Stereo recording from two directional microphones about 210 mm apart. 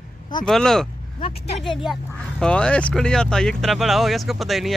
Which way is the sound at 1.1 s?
25° left (ahead or behind).